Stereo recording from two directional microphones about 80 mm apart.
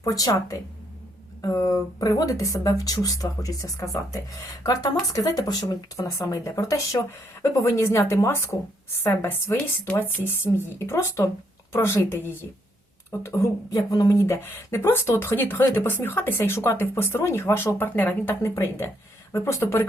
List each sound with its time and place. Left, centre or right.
0.0 s speech: left
18.4 s speech: left